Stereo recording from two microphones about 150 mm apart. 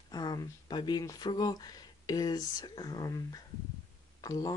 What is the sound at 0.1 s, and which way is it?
Speech, 25° left (ahead or behind).